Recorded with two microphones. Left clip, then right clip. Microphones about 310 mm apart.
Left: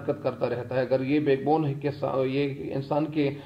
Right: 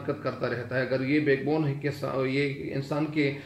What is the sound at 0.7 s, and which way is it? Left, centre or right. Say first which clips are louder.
Speech: left 1 dB; left.